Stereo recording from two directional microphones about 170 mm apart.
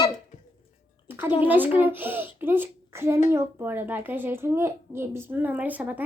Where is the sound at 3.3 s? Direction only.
15° right (ahead or behind).